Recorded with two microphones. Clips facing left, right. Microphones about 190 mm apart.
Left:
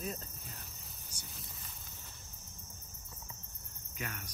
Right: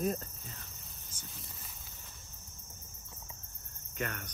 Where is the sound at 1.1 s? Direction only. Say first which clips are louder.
Right 2 dB; 15° left (ahead or behind).